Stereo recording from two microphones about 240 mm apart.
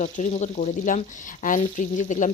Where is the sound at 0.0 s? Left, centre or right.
Left.